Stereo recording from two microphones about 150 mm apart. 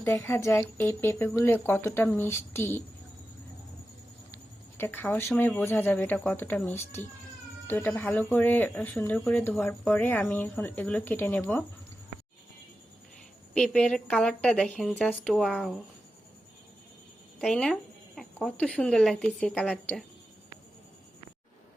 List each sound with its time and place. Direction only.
0.0 s speech: 15° left (ahead or behind)
4.8 s speech: 15° left (ahead or behind)
13.5 s speech: 5° left (ahead or behind)
17.4 s speech: 5° left (ahead or behind)